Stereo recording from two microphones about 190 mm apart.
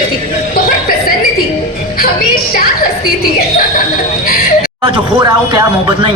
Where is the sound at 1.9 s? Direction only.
55° left (ahead or behind).